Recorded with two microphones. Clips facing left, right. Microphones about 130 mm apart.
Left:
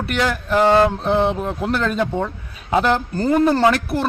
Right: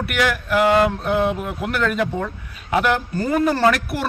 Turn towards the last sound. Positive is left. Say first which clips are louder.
# left 2 dB
turn(degrees=25)  # may be behind; listen again after turning